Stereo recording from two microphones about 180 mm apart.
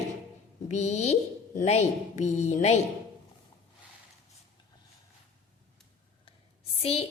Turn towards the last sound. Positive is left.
turn(degrees=35)  # may be behind; listen again after turning